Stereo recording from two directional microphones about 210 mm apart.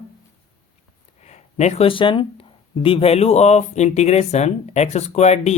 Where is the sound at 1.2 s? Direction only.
30° left (ahead or behind).